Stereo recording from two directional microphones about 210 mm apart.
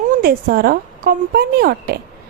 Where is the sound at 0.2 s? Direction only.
45° right (ahead or behind).